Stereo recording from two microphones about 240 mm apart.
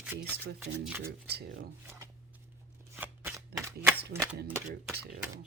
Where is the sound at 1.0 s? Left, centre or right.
Right.